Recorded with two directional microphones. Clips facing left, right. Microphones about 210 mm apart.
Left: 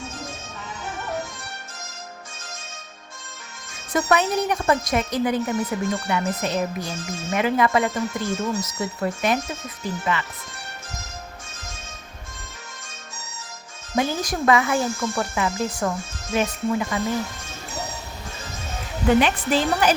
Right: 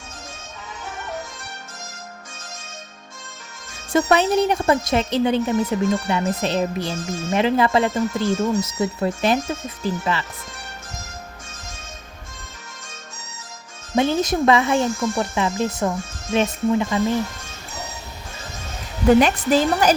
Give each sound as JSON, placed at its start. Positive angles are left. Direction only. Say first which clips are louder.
{"t": 3.9, "sound": "a woman's voice", "louder": "right 4 dB", "side_deg": -30}
{"t": 13.9, "sound": "speech", "louder": "right 5 dB", "side_deg": -25}
{"t": 19.2, "sound": "a woman's voice", "louder": "right 4 dB", "side_deg": -40}